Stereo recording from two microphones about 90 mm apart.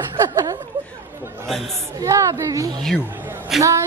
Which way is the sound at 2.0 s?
35° right (ahead or behind).